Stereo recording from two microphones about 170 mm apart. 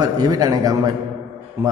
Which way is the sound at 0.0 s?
20° right (ahead or behind).